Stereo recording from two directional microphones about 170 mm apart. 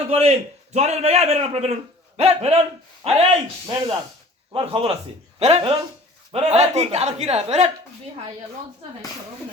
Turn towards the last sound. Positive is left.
turn(degrees=-35)  # may be behind; listen again after turning